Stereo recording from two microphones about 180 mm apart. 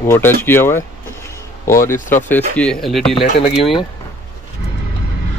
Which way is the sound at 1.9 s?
45° left (ahead or behind).